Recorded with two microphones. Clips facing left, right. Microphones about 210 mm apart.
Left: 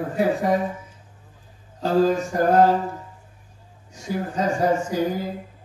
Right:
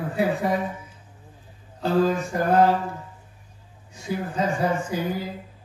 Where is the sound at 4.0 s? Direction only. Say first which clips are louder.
Left 1 dB; 45° left (ahead or behind).